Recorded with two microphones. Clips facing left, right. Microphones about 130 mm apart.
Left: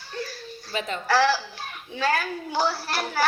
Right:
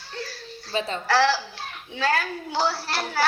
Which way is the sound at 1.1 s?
15° left (ahead or behind).